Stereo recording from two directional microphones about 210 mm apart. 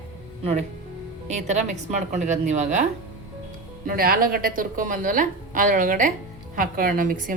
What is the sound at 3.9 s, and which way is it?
A woman's voice, 45° right (ahead or behind).